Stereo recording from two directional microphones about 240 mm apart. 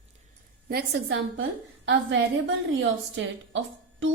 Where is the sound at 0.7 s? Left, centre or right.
Right.